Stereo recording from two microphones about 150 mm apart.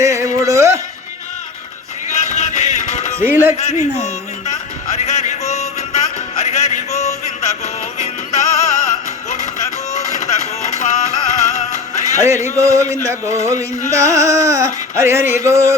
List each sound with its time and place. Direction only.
0.0 s music: 20° right (ahead or behind)
2.0 s music: 50° left (ahead or behind)
3.2 s a man's voice: 15° right (ahead or behind)
4.0 s music: 50° left (ahead or behind)
12.1 s music: 20° right (ahead or behind)